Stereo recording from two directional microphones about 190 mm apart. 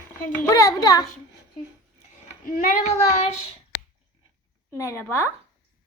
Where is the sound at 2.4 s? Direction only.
45° left (ahead or behind).